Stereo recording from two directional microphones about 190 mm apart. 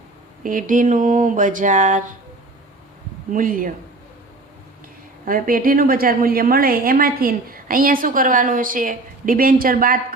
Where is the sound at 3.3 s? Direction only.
45° right (ahead or behind).